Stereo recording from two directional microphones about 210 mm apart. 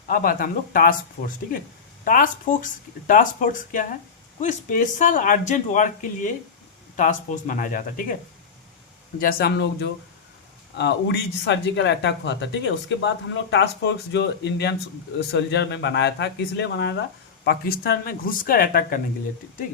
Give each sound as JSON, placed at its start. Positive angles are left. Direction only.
{"t": 0.1, "sound": "speech", "side_deg": 45}
{"t": 2.0, "sound": "speech", "side_deg": 40}
{"t": 9.2, "sound": "speech", "side_deg": 45}